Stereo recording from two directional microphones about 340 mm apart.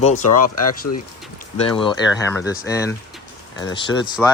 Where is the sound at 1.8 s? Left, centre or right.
Centre.